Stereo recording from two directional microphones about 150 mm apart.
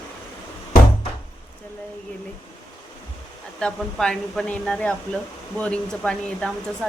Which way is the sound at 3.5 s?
5° left (ahead or behind).